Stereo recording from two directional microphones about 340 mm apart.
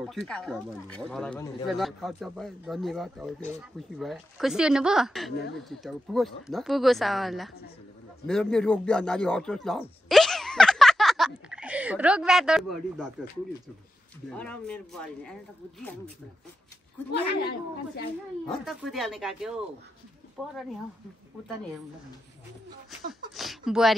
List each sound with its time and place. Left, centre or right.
0.3 s speech: centre
14.3 s speech: centre
17.1 s a woman's voice: left
18.5 s speech: centre
23.3 s a sound: centre